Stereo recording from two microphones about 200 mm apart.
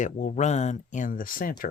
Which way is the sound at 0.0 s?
40° left (ahead or behind).